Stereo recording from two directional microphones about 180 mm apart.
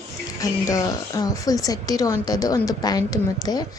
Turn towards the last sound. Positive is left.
turn(degrees=20)  # may be behind; listen again after turning